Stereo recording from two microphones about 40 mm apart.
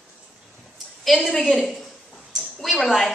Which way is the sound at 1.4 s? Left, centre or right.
Centre.